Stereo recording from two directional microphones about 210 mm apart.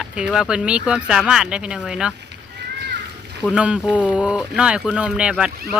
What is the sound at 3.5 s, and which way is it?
Speech, 5° right (ahead or behind).